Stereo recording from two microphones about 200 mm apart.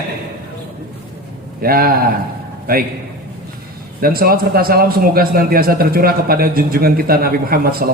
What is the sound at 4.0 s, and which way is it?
A man's voice, 50° right (ahead or behind).